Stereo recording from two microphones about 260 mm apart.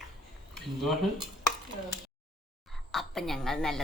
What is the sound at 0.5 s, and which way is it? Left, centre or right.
Speech, centre.